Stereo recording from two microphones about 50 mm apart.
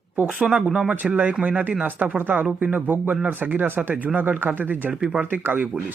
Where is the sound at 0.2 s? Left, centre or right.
Right.